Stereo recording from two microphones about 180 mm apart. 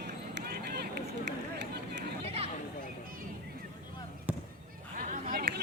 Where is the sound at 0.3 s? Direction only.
60° right (ahead or behind).